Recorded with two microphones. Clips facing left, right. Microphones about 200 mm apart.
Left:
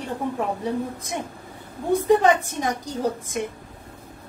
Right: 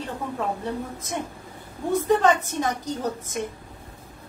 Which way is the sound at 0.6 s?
15° left (ahead or behind).